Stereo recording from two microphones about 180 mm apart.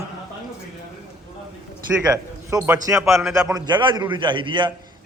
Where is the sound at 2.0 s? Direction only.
15° right (ahead or behind).